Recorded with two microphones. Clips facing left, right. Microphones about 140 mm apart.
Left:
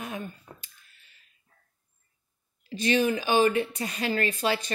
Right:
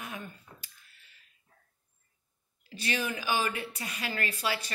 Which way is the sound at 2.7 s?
30° left (ahead or behind).